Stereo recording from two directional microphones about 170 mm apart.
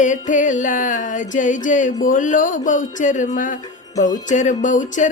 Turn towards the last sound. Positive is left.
turn(degrees=50)  # may be behind; listen again after turning